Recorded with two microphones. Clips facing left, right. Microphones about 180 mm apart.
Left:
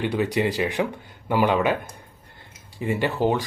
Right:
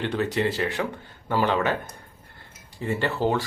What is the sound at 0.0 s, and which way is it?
Speech, 10° left (ahead or behind).